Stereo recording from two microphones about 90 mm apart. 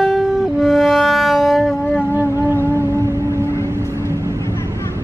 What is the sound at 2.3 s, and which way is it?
Music, 30° right (ahead or behind).